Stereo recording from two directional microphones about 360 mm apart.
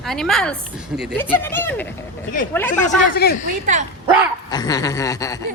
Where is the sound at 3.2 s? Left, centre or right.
Left.